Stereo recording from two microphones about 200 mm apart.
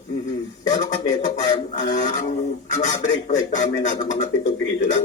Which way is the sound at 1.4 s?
20° left (ahead or behind).